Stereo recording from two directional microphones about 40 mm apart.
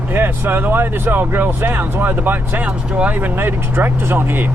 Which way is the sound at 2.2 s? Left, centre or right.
Right.